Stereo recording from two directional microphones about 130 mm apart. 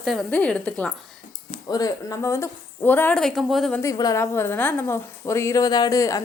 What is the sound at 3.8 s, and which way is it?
A woman's voice, 25° left (ahead or behind).